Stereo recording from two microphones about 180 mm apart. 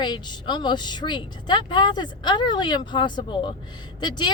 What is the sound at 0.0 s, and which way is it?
Speech, 25° left (ahead or behind).